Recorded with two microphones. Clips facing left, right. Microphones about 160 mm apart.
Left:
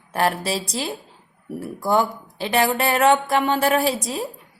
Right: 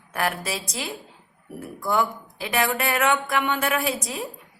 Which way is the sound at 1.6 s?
25° left (ahead or behind).